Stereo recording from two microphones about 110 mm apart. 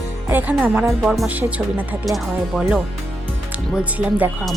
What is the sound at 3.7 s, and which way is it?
Speech, 15° right (ahead or behind).